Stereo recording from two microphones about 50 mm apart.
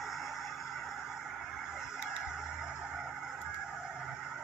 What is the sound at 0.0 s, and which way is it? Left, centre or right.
Vehicle, centre.